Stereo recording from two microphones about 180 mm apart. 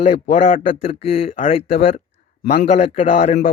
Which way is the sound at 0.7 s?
30° left (ahead or behind).